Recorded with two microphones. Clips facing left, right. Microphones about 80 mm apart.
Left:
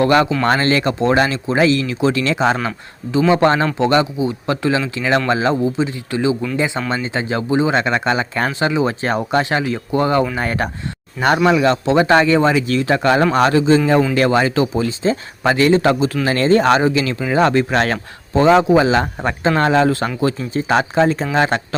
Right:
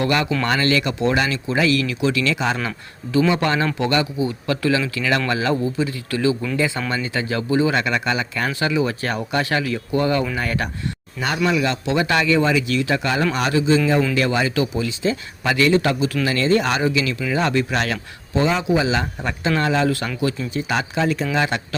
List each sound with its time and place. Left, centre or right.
0.0 s speech: left
2.6 s speech: left
19.9 s speech: left